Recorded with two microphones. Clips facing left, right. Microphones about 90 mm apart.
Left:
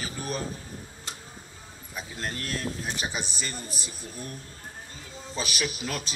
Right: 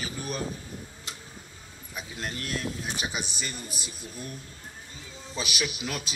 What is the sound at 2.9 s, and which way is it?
A man's voice, 35° left (ahead or behind).